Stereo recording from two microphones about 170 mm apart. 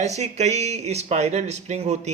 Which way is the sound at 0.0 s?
40° right (ahead or behind).